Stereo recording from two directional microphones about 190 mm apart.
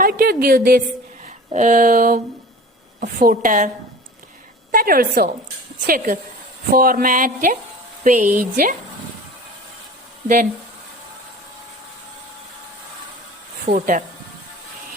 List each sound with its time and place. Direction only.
0.0 s a woman's voice: 55° right (ahead or behind)
1.5 s a woman's voice: 40° right (ahead or behind)
4.7 s a woman's voice: 50° right (ahead or behind)
13.7 s a woman's voice: 45° right (ahead or behind)